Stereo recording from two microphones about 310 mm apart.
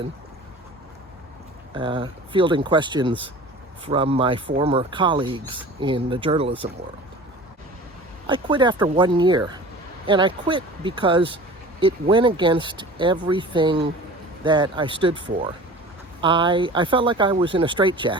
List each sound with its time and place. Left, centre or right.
1.7 s speech: centre
8.3 s speech: centre
16.2 s speech: centre